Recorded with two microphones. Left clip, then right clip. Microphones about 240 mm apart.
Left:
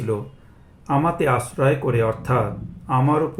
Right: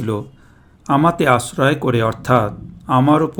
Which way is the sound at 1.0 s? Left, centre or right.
Right.